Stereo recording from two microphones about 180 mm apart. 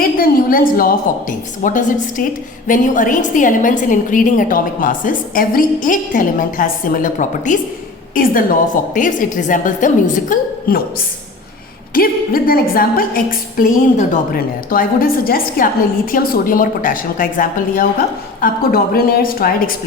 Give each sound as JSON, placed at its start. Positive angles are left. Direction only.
{"t": 0.0, "sound": "a woman's voice", "side_deg": 55}